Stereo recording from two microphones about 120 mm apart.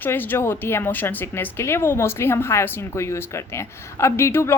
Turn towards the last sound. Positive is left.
turn(degrees=20)  # may be behind; listen again after turning